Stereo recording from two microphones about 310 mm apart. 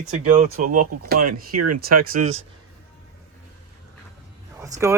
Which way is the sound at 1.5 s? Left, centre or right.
Right.